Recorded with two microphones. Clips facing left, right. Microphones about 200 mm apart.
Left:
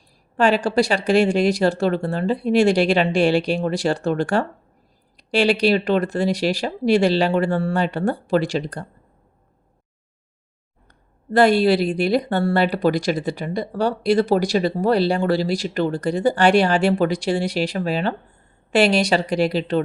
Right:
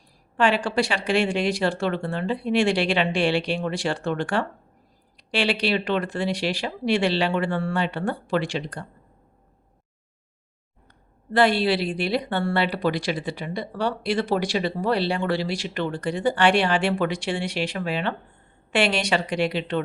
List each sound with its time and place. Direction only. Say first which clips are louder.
0.3 s a woman's voice: left 4 dB; 40° left (ahead or behind)
10.8 s a woman's voice: left 5 dB; 45° left (ahead or behind)